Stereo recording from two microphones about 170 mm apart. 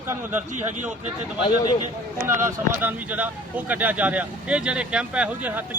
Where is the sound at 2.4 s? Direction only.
10° right (ahead or behind).